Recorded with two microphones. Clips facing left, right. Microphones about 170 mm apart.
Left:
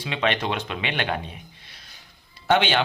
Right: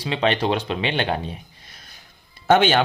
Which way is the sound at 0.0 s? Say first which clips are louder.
Right 4 dB; 35° right (ahead or behind).